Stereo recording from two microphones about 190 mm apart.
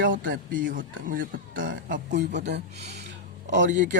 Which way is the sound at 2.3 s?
65° right (ahead or behind).